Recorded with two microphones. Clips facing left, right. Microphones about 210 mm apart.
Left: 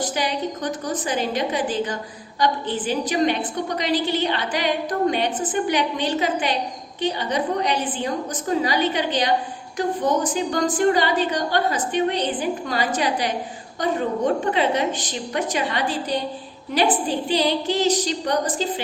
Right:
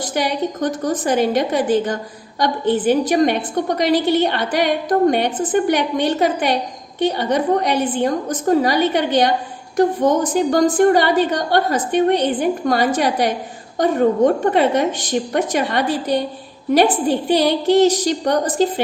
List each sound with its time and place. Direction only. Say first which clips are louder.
0.1 s a woman's voice: right 4 dB; 50° right (ahead or behind)
17.3 s a woman's voice: right 7 dB; 50° right (ahead or behind)